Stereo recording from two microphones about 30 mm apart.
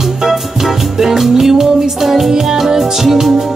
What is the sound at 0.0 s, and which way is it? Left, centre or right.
Music, centre.